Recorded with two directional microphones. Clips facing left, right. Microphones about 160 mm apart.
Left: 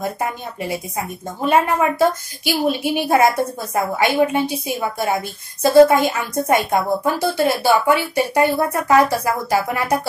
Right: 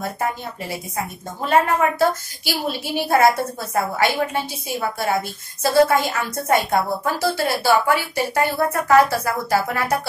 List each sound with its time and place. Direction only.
0.6 s a woman's voice: 15° left (ahead or behind)